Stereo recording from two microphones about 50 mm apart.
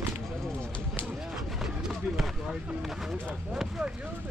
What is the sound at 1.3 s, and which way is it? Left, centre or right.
Speech, centre.